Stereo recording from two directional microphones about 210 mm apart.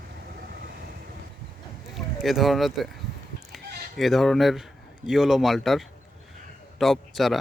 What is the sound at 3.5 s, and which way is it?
Chicken, centre (ahead or behind).